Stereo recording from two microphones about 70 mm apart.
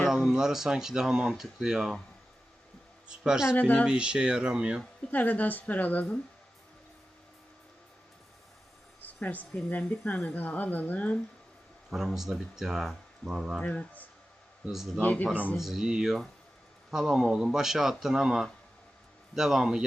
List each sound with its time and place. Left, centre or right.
0.1 s speech: centre
3.2 s speech: centre
3.5 s a woman's voice: left
3.8 s speech: centre
5.1 s a woman's voice: left
9.0 s a sound: left
9.6 s a woman's voice: left
12.1 s speech: centre
13.6 s a woman's voice: centre
15.5 s speech: centre